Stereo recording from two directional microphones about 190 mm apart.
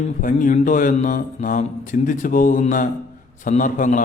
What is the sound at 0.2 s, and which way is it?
Speech, 45° left (ahead or behind).